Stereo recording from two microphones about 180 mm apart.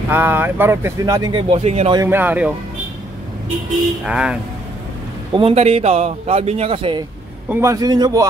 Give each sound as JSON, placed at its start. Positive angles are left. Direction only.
{"t": 0.1, "sound": "speech", "side_deg": -10}
{"t": 1.5, "sound": "a man's voice", "side_deg": -35}
{"t": 2.0, "sound": "speech", "side_deg": -10}
{"t": 4.0, "sound": "speech", "side_deg": -5}
{"t": 5.3, "sound": "a man's voice", "side_deg": -30}
{"t": 7.4, "sound": "a man's voice", "side_deg": -15}